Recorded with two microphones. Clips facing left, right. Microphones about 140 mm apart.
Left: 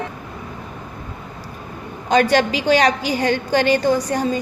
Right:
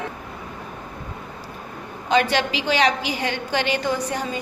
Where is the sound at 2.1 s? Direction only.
45° left (ahead or behind).